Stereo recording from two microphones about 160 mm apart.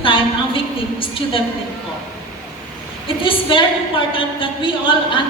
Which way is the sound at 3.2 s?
35° left (ahead or behind).